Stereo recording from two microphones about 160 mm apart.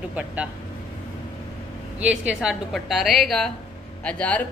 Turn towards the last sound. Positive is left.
turn(degrees=10)  # may be behind; listen again after turning